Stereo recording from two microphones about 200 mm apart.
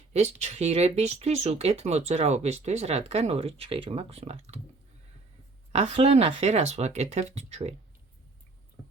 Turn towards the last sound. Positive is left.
turn(degrees=-30)  # may be behind; listen again after turning